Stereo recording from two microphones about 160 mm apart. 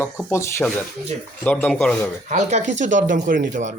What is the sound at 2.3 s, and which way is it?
Speech, 45° right (ahead or behind).